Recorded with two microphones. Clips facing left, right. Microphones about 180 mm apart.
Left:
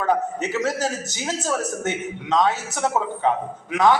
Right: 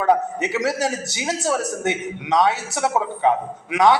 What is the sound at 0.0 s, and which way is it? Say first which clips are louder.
A man's voice: right 3 dB; 15° right (ahead or behind).